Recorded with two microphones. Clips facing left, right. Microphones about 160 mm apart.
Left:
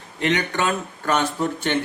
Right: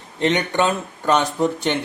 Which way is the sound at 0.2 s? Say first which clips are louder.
Right 3 dB; 25° right (ahead or behind).